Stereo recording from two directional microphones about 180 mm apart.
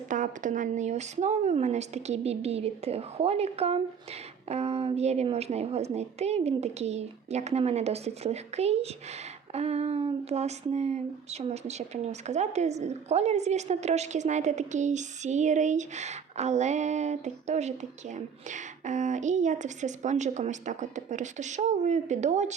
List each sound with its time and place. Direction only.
0.1 s speech: 45° right (ahead or behind)